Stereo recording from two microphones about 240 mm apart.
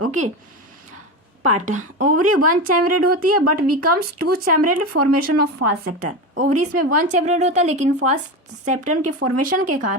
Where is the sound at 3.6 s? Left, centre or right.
Right.